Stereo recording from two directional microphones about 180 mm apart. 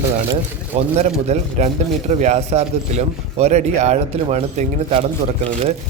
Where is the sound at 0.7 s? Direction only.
35° right (ahead or behind).